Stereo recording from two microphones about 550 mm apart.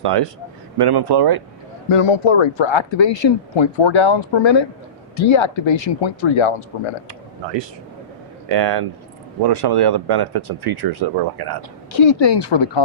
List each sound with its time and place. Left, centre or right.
0.8 s speech: right
1.9 s speech: left
8.4 s speech: right
11.9 s speech: left